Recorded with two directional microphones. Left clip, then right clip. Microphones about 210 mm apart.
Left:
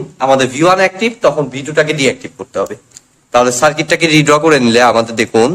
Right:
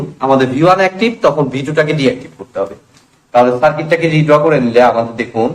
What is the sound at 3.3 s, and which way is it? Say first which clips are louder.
A man's voice: even; 55° left (ahead or behind).